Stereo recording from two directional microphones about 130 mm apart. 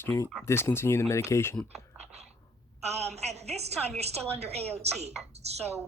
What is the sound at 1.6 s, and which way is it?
Typing, 55° right (ahead or behind).